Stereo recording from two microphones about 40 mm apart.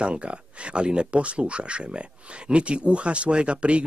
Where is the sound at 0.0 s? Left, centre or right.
Right.